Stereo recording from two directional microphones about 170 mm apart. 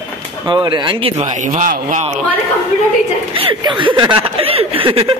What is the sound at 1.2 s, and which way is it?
Speech, 50° right (ahead or behind).